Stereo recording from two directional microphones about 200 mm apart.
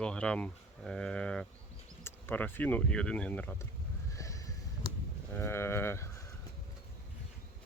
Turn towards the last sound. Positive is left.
turn(degrees=15)  # may be behind; listen again after turning